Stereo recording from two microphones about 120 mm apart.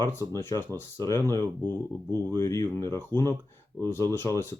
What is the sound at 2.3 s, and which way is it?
Speech, 25° left (ahead or behind).